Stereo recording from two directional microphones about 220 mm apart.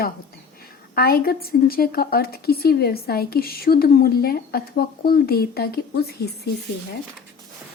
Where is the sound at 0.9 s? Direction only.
45° left (ahead or behind).